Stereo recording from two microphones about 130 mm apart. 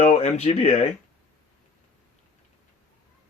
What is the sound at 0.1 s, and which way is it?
Speech, 60° left (ahead or behind).